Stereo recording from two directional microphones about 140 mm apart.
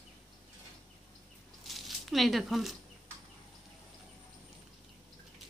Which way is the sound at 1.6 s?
Centre (ahead or behind).